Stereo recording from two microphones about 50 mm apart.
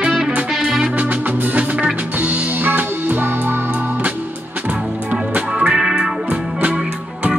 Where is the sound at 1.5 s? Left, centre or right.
Right.